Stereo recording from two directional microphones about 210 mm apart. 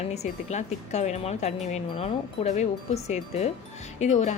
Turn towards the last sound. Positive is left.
turn(degrees=35)  # may be behind; listen again after turning